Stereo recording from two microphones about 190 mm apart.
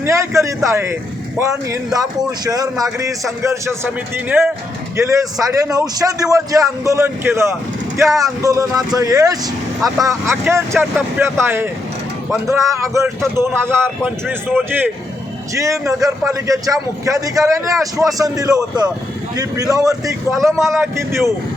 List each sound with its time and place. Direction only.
0.0 s a man's voice: 15° right (ahead or behind)
15.5 s a man's voice: 15° right (ahead or behind)